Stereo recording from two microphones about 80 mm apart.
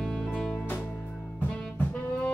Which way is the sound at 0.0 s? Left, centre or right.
Centre.